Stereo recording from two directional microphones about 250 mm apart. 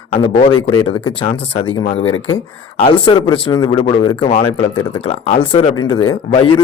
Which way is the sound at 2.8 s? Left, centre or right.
Centre.